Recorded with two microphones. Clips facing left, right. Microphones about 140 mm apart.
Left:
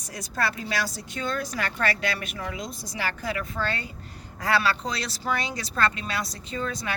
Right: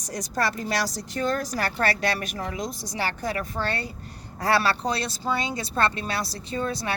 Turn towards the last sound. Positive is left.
turn(degrees=-30)  # may be behind; listen again after turning